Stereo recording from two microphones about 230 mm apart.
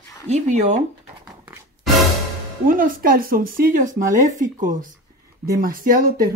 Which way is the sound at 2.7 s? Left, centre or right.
Right.